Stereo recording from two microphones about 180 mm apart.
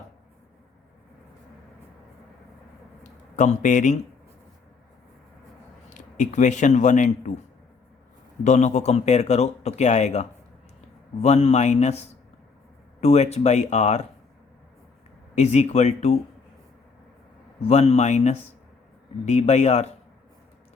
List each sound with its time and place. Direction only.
3.0 s a sound: 45° left (ahead or behind)
5.9 s speech: 45° left (ahead or behind)
8.4 s speech: 40° left (ahead or behind)
15.4 s speech: 40° left (ahead or behind)
17.7 s speech: 35° left (ahead or behind)